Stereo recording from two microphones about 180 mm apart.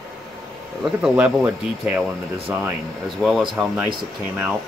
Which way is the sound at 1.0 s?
10° right (ahead or behind).